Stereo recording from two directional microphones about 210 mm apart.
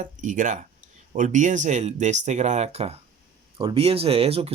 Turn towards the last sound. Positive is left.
turn(degrees=-30)  # may be behind; listen again after turning